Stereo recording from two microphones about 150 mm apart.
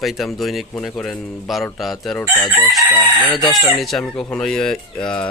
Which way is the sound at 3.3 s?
30° left (ahead or behind).